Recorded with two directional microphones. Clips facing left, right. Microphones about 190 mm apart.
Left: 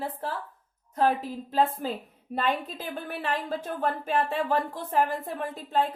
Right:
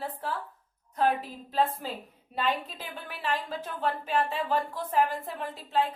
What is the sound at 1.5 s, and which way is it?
A woman's voice, 45° left (ahead or behind).